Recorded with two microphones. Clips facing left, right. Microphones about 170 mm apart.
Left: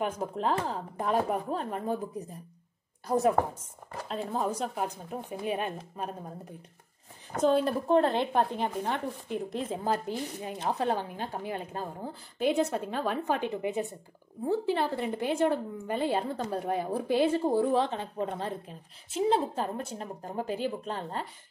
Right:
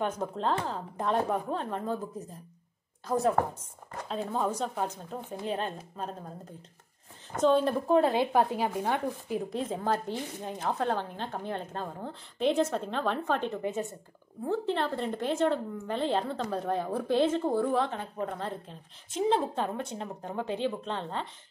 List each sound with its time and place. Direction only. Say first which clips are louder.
0.2 s a woman's voice: left 1 dB; 10° left (ahead or behind)
4.1 s a woman's voice: right 1 dB; centre (ahead or behind)
7.3 s speech: right 1 dB; 5° left (ahead or behind)
9.5 s speech: even; 5° left (ahead or behind)
10.6 s a woman's voice: left 1 dB; 20° left (ahead or behind)
16.3 s a woman's voice: even; 25° left (ahead or behind)
16.7 s a woman's voice: even; 10° left (ahead or behind); by 18.5 s 25° left (ahead or behind)
18.7 s a woman's voice: left 1 dB; 5° left (ahead or behind)